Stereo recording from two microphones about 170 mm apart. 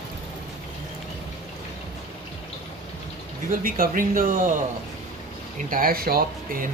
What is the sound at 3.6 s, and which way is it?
Speech, 55° right (ahead or behind).